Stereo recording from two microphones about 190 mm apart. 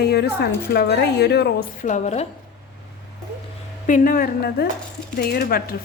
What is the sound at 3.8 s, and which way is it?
A woman's voice, 45° left (ahead or behind).